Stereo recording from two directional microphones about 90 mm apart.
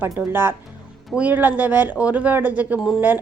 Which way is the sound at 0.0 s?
25° right (ahead or behind).